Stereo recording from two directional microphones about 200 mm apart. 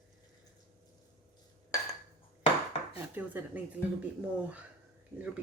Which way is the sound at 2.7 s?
35° left (ahead or behind).